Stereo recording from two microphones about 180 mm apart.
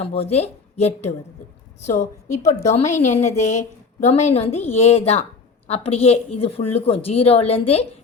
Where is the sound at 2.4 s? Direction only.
15° left (ahead or behind).